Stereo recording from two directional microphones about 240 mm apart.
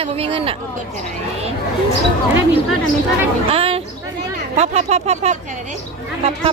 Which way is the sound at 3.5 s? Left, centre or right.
Right.